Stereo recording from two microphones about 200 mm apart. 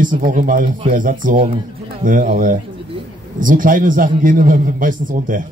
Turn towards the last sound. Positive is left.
turn(degrees=-40)  # may be behind; listen again after turning